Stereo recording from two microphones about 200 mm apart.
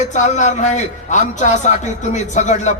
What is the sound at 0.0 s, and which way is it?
A man's voice, 35° left (ahead or behind).